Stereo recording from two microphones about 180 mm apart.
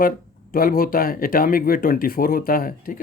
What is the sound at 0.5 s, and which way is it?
Speech, 55° left (ahead or behind).